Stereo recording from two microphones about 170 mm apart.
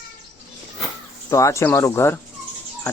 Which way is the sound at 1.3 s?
20° left (ahead or behind).